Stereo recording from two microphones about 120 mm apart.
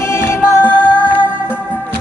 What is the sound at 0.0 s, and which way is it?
Music, 20° left (ahead or behind).